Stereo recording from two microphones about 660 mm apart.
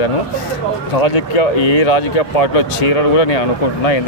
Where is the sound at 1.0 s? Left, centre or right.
Left.